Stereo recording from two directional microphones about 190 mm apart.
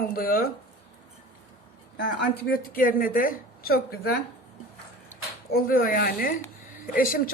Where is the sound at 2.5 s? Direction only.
50° left (ahead or behind).